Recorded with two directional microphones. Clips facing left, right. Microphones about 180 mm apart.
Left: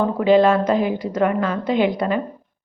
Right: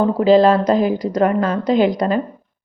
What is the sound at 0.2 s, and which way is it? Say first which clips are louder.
A woman's voice: right 2 dB; 35° right (ahead or behind).